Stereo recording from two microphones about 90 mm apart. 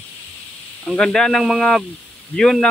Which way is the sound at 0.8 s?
5° left (ahead or behind).